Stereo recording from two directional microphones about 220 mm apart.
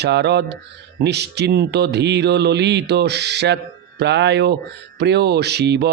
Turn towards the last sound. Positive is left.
turn(degrees=-50)  # may be behind; listen again after turning